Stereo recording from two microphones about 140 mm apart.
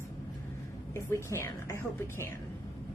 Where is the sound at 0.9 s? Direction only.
20° left (ahead or behind).